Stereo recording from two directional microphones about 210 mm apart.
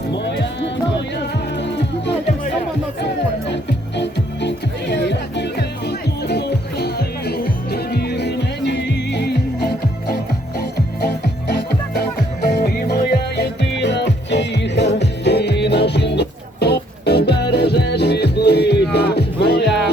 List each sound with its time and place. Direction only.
0.1 s music: 55° left (ahead or behind)
3.5 s music: 55° left (ahead or behind)
19.6 s music: centre (ahead or behind)